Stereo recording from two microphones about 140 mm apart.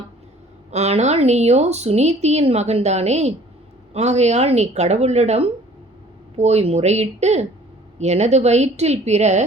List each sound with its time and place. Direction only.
0.7 s a woman's voice: 50° right (ahead or behind)